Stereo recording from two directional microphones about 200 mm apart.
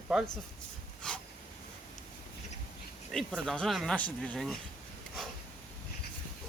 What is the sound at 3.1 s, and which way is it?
Speech, centre (ahead or behind).